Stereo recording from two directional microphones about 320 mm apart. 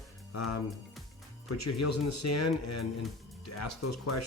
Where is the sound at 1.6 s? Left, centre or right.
Left.